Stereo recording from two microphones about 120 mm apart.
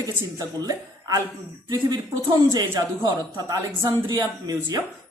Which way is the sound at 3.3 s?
30° right (ahead or behind).